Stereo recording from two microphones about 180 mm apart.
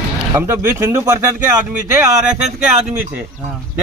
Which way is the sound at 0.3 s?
15° right (ahead or behind).